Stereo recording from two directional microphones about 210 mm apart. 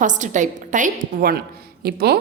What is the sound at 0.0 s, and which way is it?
A woman's voice, 35° right (ahead or behind).